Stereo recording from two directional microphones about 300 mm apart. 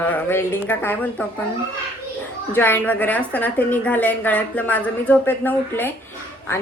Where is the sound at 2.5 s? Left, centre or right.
Centre.